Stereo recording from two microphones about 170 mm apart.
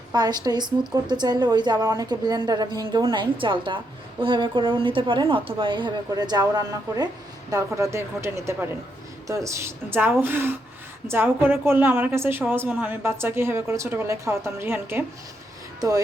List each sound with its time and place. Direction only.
0.1 s a woman's voice: 25° right (ahead or behind)